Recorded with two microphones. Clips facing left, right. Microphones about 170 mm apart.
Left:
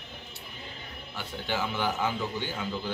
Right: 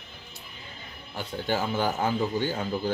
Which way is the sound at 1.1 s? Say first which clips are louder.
Right 4 dB; 40° right (ahead or behind).